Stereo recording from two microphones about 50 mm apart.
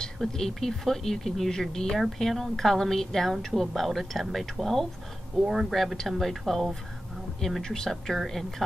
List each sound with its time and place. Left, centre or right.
0.2 s a woman's voice: centre
5.8 s a woman's voice: centre